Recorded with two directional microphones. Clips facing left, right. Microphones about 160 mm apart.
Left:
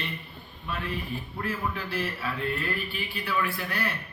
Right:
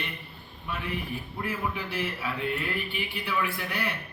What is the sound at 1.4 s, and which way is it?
A man's voice, 15° right (ahead or behind).